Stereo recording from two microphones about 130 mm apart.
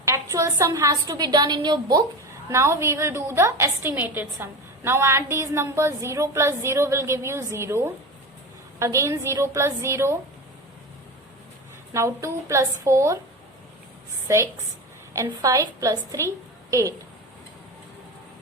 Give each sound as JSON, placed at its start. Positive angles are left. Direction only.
{"t": 0.0, "sound": "a woman's voice", "side_deg": -25}
{"t": 2.5, "sound": "a woman's voice", "side_deg": -20}
{"t": 11.9, "sound": "a woman's voice", "side_deg": -20}
{"t": 14.3, "sound": "a woman's voice", "side_deg": -20}